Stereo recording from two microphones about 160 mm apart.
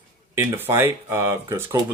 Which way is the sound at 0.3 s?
15° right (ahead or behind).